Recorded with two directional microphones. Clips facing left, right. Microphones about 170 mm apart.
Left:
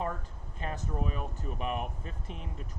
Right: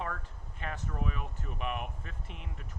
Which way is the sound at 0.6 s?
35° left (ahead or behind).